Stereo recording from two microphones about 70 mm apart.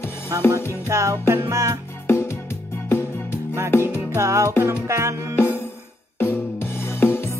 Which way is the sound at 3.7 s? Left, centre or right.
Left.